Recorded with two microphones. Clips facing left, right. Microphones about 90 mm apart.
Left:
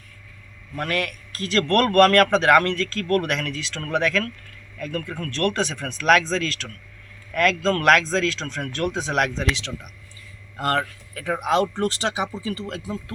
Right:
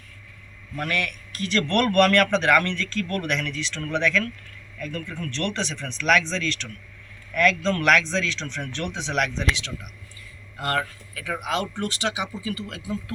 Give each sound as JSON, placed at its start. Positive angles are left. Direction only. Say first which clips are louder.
{"t": 0.8, "sound": "speech", "louder": "left 2 dB", "side_deg": 40}
{"t": 11.1, "sound": "speech", "louder": "left 6 dB", "side_deg": 35}